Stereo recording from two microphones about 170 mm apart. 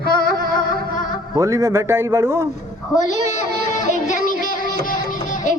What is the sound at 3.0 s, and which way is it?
Child singing, 45° left (ahead or behind).